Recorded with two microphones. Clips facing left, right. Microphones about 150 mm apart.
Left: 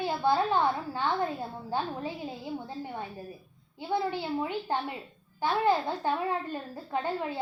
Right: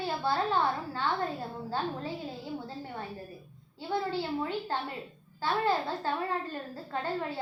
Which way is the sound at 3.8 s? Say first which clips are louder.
Left 1 dB; 15° left (ahead or behind).